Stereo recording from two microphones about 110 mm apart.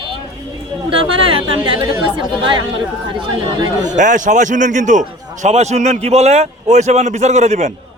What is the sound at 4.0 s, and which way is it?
A man's voice, 90° right.